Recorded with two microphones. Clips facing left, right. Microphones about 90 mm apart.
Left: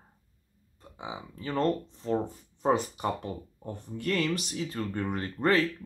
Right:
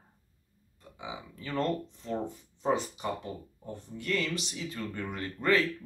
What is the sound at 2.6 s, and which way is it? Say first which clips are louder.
Speech: left 3 dB; 50° left (ahead or behind).